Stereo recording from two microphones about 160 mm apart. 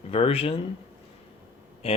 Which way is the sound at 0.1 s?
35° left (ahead or behind).